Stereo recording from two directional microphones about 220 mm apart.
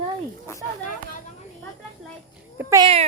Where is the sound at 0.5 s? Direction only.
10° left (ahead or behind).